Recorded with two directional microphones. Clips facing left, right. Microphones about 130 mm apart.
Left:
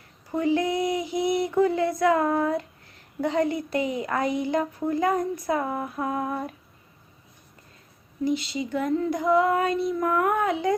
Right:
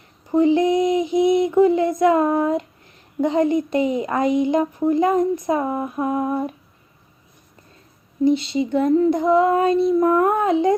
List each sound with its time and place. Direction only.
0.3 s child singing: 20° right (ahead or behind)
3.2 s speech: 20° right (ahead or behind)
8.2 s speech: 25° right (ahead or behind)